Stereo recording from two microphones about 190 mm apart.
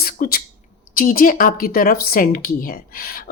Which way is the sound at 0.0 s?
50° left (ahead or behind).